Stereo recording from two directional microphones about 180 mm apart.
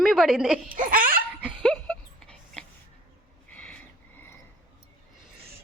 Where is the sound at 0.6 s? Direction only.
50° right (ahead or behind).